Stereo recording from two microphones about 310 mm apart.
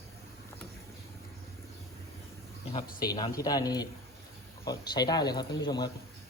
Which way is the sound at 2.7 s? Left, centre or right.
Left.